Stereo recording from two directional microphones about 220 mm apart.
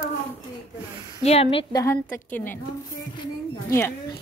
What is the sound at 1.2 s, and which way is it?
A woman's voice, 25° left (ahead or behind).